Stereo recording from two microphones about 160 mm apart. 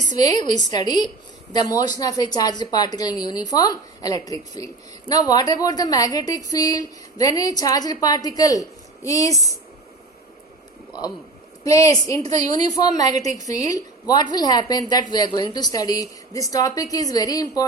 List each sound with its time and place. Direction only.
0.2 s a woman's voice: 25° left (ahead or behind)
11.6 s a woman's voice: 20° left (ahead or behind)
13.1 s a woman's voice: 50° right (ahead or behind)
13.7 s a woman's voice: 25° left (ahead or behind)